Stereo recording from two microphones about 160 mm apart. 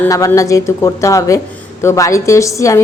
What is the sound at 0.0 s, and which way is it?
A woman's voice, 15° left (ahead or behind).